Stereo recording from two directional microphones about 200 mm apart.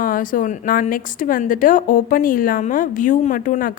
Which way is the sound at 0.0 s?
45° left (ahead or behind).